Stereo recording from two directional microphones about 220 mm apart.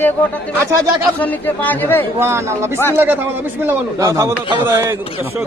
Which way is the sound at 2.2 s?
10° right (ahead or behind).